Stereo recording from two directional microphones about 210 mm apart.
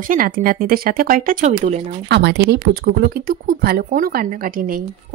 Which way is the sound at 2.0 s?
55° right (ahead or behind).